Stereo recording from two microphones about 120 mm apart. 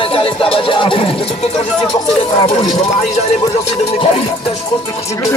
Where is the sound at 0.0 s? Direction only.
50° left (ahead or behind).